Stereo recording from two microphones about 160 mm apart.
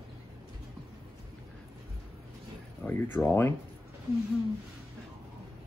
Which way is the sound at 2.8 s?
15° left (ahead or behind).